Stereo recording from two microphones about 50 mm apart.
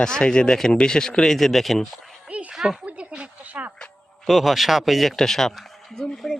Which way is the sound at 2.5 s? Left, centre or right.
Centre.